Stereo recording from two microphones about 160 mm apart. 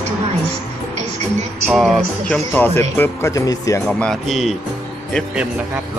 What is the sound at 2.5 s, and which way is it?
Speech, 15° left (ahead or behind).